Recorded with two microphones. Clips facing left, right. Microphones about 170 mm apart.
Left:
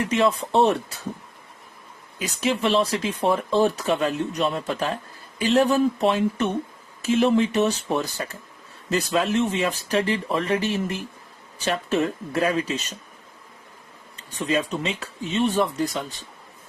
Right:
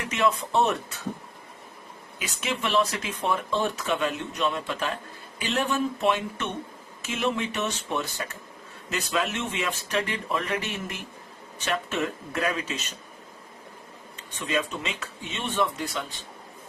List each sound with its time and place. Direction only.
0.0 s speech: 35° left (ahead or behind)
2.1 s speech: 35° left (ahead or behind)
14.2 s speech: 35° left (ahead or behind)